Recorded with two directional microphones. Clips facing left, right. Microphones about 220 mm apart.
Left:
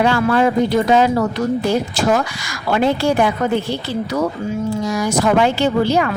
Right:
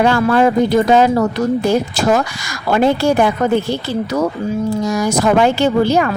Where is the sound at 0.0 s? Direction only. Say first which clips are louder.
Right 2 dB; 45° right (ahead or behind).